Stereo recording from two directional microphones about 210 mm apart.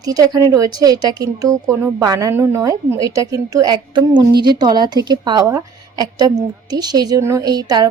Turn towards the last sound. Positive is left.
turn(degrees=-20)  # may be behind; listen again after turning